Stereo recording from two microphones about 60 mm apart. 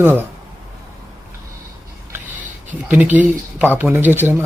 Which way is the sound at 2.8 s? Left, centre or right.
Right.